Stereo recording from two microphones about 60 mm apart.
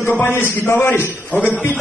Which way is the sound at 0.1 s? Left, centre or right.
Left.